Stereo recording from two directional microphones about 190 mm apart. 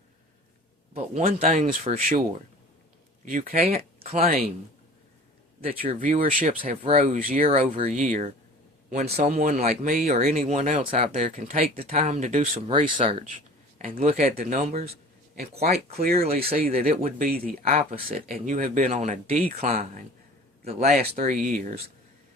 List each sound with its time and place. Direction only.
0.9 s speech: 50° right (ahead or behind)
3.2 s speech: 45° right (ahead or behind)
5.6 s speech: 30° right (ahead or behind)
6.0 s speech: 45° right (ahead or behind)
7.4 s speech: 35° right (ahead or behind)
9.3 s speech: 45° right (ahead or behind)
11.7 s speech: 30° right (ahead or behind)
12.6 s speech: 30° right (ahead or behind)
13.2 s speech: 40° right (ahead or behind)
16.8 s speech: 45° right (ahead or behind)
17.6 s speech: 35° right (ahead or behind)